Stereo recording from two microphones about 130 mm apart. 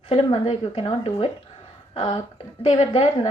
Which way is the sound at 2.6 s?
50° left (ahead or behind).